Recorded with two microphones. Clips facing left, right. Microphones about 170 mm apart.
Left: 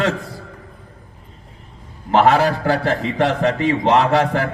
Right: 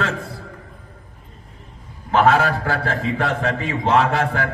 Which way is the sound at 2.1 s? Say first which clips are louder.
Left 2 dB; 35° left (ahead or behind).